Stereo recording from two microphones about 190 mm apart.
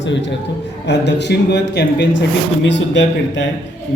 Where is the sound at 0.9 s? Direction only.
65° left (ahead or behind).